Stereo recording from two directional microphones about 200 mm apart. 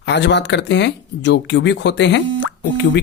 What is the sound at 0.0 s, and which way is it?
Speech, 60° left (ahead or behind).